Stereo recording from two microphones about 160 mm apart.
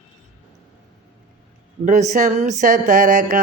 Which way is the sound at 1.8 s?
50° right (ahead or behind).